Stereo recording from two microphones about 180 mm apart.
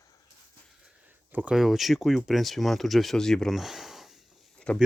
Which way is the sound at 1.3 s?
5° right (ahead or behind).